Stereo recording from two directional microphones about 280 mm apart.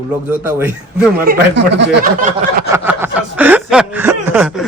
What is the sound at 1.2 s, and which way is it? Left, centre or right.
Speech, right.